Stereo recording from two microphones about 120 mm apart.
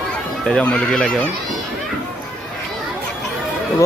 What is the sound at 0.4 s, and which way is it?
Speech, 5° left (ahead or behind).